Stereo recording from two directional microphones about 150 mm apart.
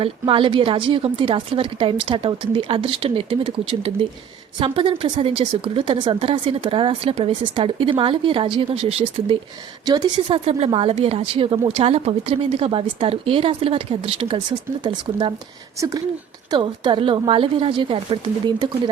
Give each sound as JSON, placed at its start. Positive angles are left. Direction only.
{"t": 0.0, "sound": "a woman's voice", "side_deg": -35}
{"t": 10.2, "sound": "speech", "side_deg": -45}
{"t": 15.8, "sound": "a woman's voice", "side_deg": -25}